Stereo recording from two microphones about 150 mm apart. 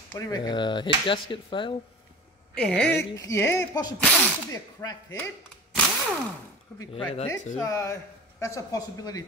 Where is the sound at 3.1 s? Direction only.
20° left (ahead or behind).